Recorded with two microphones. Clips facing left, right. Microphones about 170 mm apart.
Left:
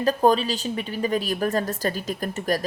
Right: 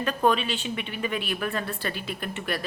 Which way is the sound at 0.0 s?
35° left (ahead or behind).